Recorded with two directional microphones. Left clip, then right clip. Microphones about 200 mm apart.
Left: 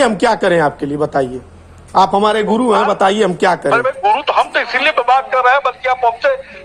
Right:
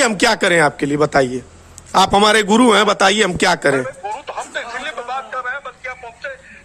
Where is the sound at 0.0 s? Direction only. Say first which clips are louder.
Left 2 dB; 50° right (ahead or behind).